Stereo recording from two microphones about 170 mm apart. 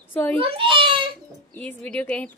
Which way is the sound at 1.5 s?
10° left (ahead or behind).